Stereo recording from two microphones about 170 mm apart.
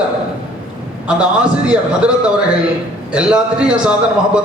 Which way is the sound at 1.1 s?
5° right (ahead or behind).